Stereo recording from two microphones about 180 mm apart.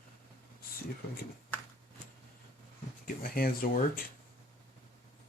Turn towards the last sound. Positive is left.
turn(degrees=55)  # may be behind; listen again after turning